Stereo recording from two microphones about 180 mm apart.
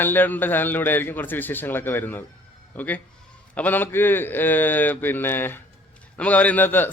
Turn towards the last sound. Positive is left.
turn(degrees=10)  # may be behind; listen again after turning